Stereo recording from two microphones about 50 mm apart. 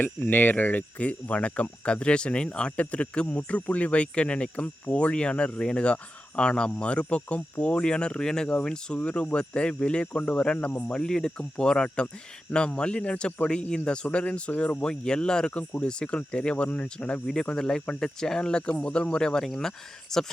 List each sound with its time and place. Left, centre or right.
0.0 s a man's voice: left
10.7 s speech: left
10.9 s a man's voice: centre